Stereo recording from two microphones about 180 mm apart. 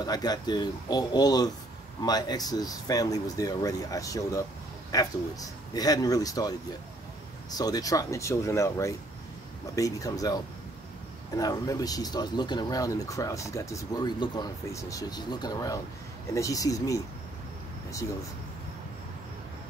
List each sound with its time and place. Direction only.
0.0 s speech: 20° left (ahead or behind)
7.5 s speech: 20° left (ahead or behind)